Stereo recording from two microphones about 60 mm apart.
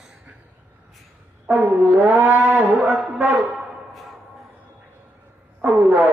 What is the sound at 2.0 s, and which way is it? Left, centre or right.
Cattle, right.